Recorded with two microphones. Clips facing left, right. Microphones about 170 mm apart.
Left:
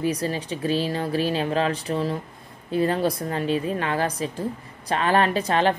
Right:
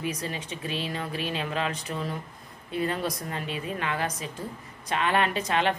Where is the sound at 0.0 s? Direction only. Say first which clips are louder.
Left 7 dB; 35° left (ahead or behind).